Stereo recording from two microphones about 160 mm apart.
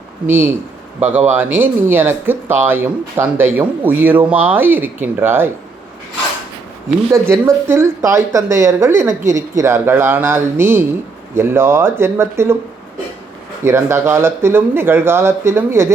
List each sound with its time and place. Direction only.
0.3 s speech: 15° right (ahead or behind)
7.1 s speech: 20° right (ahead or behind)
13.7 s speech: 15° right (ahead or behind)